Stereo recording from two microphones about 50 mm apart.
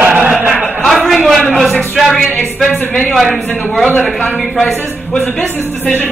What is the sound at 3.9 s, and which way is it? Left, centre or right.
Speech, centre.